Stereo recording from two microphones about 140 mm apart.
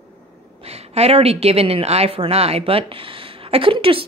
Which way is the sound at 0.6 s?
50° right (ahead or behind).